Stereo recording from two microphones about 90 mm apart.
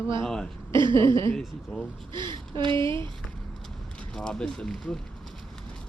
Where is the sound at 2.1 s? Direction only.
60° right (ahead or behind).